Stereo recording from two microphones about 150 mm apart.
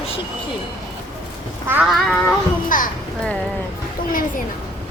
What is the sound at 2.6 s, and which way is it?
Speech, 60° left (ahead or behind).